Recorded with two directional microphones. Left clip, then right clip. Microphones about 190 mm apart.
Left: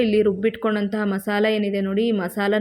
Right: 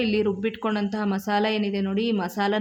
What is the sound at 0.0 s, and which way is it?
Speech, 10° left (ahead or behind).